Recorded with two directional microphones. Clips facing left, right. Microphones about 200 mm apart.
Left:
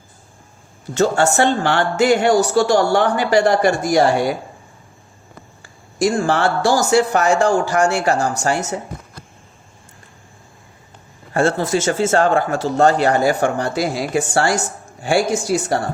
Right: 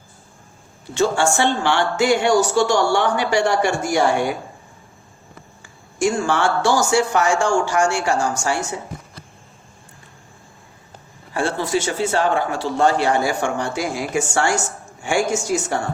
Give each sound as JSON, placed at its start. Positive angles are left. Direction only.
{"t": 0.9, "sound": "speech", "side_deg": 40}
{"t": 6.2, "sound": "speech", "side_deg": 35}
{"t": 11.3, "sound": "speech", "side_deg": 45}